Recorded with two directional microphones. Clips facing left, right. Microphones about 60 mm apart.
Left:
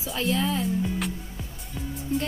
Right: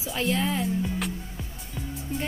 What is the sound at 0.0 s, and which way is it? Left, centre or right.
Speech, right.